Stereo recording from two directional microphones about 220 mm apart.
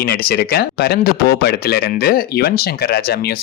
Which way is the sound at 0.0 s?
45° left (ahead or behind).